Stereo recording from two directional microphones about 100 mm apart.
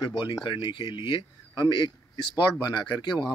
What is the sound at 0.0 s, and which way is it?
Speech, 50° left (ahead or behind).